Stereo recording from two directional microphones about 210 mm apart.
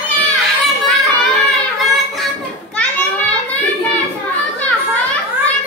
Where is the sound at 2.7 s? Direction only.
5° left (ahead or behind).